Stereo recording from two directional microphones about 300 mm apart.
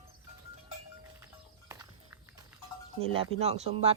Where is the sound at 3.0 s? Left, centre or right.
Centre.